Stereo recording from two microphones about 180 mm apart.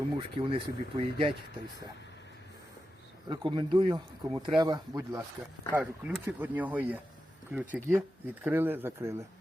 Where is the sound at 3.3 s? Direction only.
25° right (ahead or behind).